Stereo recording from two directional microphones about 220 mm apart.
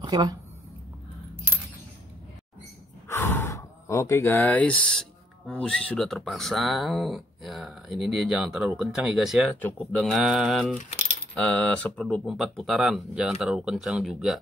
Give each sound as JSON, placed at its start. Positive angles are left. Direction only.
{"t": 0.0, "sound": "speech", "side_deg": -15}
{"t": 3.1, "sound": "gasp", "side_deg": 10}
{"t": 5.5, "sound": "speech", "side_deg": 5}